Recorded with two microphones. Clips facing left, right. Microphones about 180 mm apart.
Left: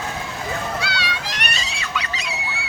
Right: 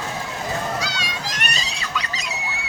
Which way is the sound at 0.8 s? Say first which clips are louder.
Left 1 dB; 45° right (ahead or behind).